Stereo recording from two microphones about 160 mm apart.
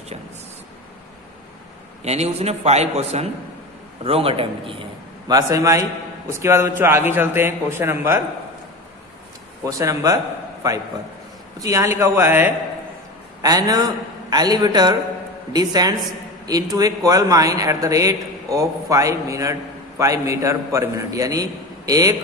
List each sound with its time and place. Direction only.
2.0 s a man's voice: 45° right (ahead or behind)
5.3 s a man's voice: 20° right (ahead or behind)
9.7 s a man's voice: 20° right (ahead or behind)
13.4 s a man's voice: 25° right (ahead or behind)